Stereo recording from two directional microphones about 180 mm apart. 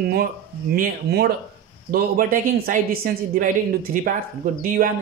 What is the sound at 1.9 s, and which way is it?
A woman's voice, 50° right (ahead or behind).